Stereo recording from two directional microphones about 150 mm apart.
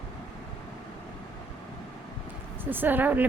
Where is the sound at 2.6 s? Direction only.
15° right (ahead or behind).